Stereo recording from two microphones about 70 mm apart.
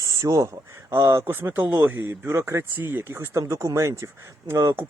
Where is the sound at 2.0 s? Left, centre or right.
Right.